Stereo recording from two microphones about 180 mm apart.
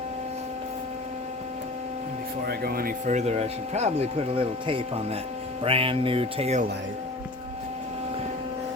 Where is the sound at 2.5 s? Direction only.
55° right (ahead or behind); by 6.6 s 35° right (ahead or behind).